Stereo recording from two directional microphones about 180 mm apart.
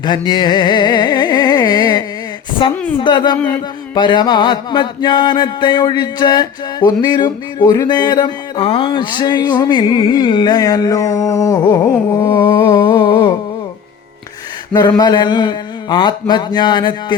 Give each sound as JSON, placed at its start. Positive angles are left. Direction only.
{"t": 0.0, "sound": "carnatic music", "side_deg": 25}
{"t": 2.6, "sound": "mantra", "side_deg": 25}
{"t": 14.7, "sound": "mantra", "side_deg": 25}